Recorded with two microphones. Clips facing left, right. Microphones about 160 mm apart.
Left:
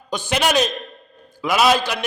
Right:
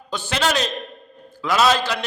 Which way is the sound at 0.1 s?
15° left (ahead or behind).